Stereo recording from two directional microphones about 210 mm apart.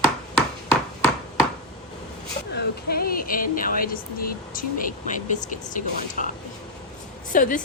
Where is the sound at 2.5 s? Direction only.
50° left (ahead or behind).